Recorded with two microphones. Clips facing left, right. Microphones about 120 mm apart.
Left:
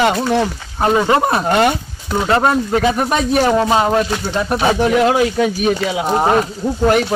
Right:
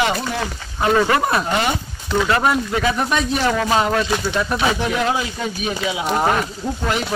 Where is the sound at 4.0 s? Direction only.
45° left (ahead or behind).